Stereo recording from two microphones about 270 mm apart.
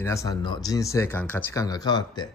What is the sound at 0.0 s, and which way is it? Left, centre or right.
A man's voice, centre.